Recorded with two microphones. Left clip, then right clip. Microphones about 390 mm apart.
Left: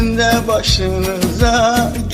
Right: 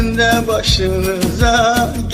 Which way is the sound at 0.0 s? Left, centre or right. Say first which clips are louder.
Right 1 dB; centre.